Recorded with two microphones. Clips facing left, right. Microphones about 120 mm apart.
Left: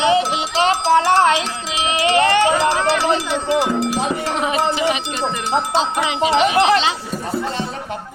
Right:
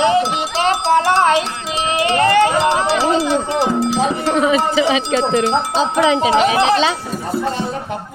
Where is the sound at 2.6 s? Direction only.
25° right (ahead or behind).